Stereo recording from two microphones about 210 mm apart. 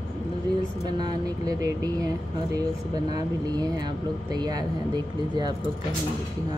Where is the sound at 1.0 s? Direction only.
20° right (ahead or behind).